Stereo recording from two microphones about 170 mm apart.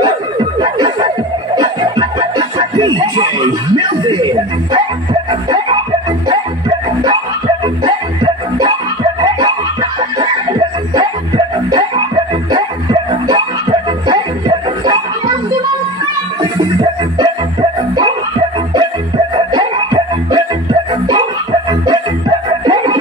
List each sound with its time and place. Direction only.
0.6 s music: 25° right (ahead or behind)
7.6 s music: 25° right (ahead or behind)
9.2 s chicken: 30° right (ahead or behind)
11.0 s music: 25° right (ahead or behind)
17.2 s music: 30° right (ahead or behind)
19.3 s music: 25° right (ahead or behind)